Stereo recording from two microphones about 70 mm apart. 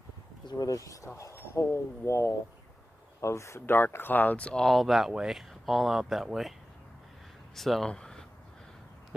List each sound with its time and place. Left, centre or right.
0.5 s speech: left; by 4.6 s centre
4.6 s speech: centre
7.5 s speech: centre
7.9 s a sound: centre